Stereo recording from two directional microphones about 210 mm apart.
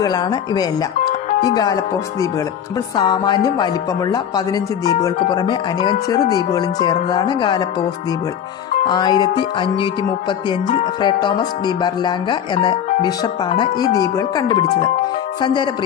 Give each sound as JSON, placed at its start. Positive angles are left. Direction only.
{"t": 0.0, "sound": "speech", "side_deg": 20}
{"t": 3.0, "sound": "speech", "side_deg": 20}
{"t": 5.3, "sound": "speech", "side_deg": 20}
{"t": 8.8, "sound": "speech", "side_deg": 20}
{"t": 11.0, "sound": "speech", "side_deg": 20}